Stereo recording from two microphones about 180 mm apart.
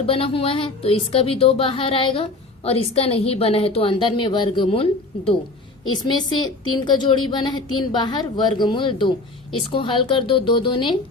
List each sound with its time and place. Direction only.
0.0 s a woman's voice: 30° left (ahead or behind)